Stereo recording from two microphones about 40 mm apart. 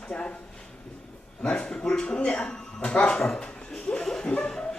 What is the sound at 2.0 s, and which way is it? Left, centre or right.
Speech, left.